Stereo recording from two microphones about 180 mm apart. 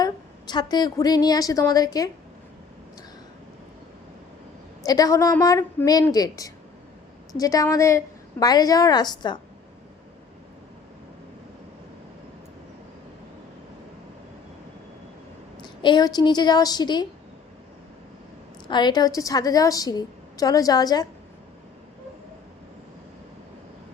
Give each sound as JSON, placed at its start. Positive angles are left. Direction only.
{"t": 0.0, "sound": "a woman's voice", "side_deg": 25}
{"t": 4.9, "sound": "a woman's voice", "side_deg": 20}
{"t": 15.6, "sound": "a woman's voice", "side_deg": 25}
{"t": 18.7, "sound": "a woman's voice", "side_deg": 25}